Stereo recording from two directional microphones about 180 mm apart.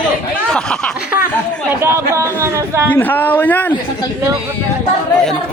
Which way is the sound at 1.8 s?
15° right (ahead or behind).